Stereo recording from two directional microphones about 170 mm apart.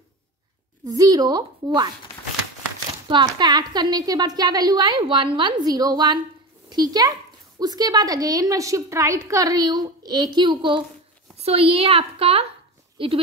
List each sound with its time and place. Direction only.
0.8 s a woman's voice: 20° right (ahead or behind)
3.1 s a woman's voice: 25° right (ahead or behind)